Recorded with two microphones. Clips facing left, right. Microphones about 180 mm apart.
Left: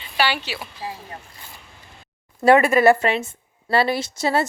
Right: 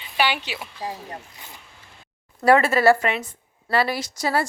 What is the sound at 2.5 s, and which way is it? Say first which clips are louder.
A woman's voice: left 2 dB; 15° left (ahead or behind).